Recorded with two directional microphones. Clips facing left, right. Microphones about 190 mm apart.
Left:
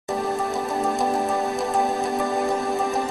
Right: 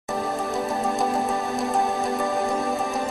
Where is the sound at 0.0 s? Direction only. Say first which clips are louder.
Left 2 dB; centre (ahead or behind).